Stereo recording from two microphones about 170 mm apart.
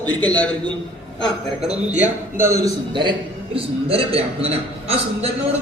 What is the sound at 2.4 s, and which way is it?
A man's voice, 20° right (ahead or behind).